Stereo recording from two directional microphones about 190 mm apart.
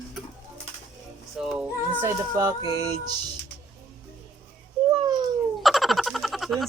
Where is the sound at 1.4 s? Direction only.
Centre (ahead or behind).